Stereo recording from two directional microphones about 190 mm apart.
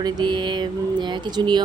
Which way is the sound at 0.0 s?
25° right (ahead or behind).